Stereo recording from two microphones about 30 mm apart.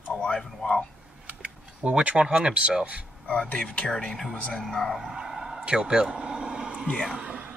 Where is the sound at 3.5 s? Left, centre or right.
Left.